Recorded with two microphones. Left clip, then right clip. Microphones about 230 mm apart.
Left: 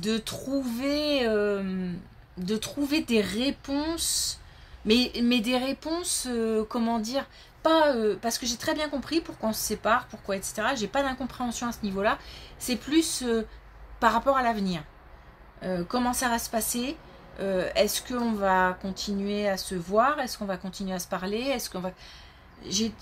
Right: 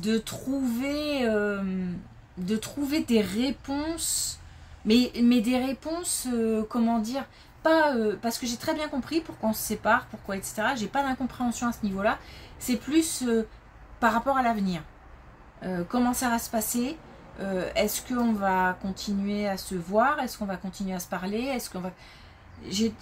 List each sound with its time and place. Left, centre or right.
0.0 s speech: left